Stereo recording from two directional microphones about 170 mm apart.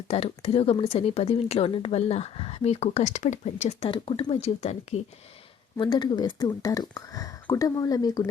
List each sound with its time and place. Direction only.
0.1 s a woman's voice: 35° left (ahead or behind)
5.8 s speech: 30° left (ahead or behind)